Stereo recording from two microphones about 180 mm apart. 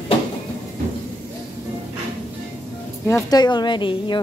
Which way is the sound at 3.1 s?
20° left (ahead or behind).